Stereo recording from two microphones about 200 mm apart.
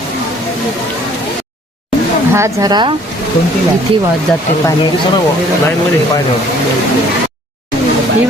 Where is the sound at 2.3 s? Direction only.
15° right (ahead or behind).